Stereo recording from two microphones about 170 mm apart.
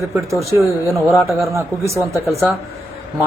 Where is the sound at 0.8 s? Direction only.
15° right (ahead or behind).